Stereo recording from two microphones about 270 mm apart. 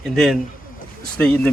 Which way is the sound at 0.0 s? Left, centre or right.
Centre.